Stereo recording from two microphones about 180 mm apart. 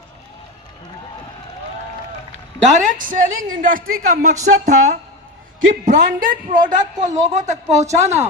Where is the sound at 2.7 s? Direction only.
45° right (ahead or behind).